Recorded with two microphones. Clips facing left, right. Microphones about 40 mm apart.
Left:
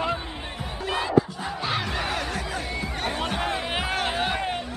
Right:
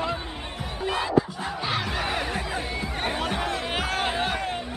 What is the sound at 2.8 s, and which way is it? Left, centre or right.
Music, centre.